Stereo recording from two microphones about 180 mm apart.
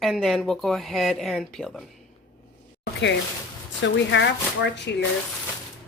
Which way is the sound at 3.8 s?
85° left.